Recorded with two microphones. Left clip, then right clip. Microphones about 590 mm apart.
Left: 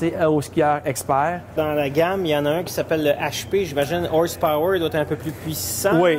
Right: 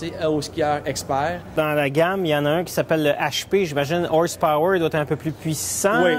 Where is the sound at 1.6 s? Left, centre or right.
Right.